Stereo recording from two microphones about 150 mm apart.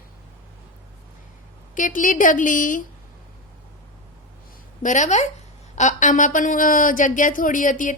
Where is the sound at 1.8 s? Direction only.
60° left (ahead or behind).